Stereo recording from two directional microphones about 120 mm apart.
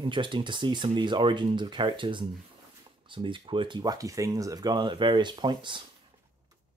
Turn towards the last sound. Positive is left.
turn(degrees=-40)  # may be behind; listen again after turning